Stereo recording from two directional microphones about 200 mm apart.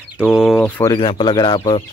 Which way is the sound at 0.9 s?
25° left (ahead or behind).